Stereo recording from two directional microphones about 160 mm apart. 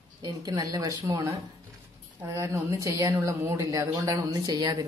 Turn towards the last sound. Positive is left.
turn(degrees=-25)  # may be behind; listen again after turning